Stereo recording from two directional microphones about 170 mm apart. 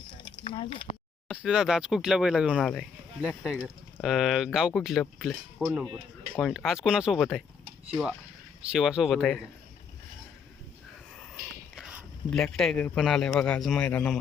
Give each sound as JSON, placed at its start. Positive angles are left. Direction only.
{"t": 0.4, "sound": "speech", "side_deg": 30}
{"t": 1.3, "sound": "speech", "side_deg": -5}
{"t": 8.6, "sound": "speech", "side_deg": -5}
{"t": 12.3, "sound": "speech", "side_deg": 0}